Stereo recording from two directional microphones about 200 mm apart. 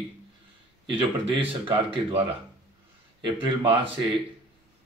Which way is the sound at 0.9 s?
25° right (ahead or behind).